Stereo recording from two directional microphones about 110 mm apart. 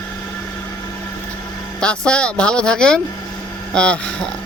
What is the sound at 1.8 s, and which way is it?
Speech, 10° left (ahead or behind).